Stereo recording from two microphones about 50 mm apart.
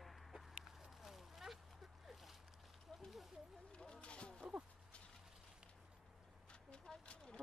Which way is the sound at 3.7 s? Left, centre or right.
Centre.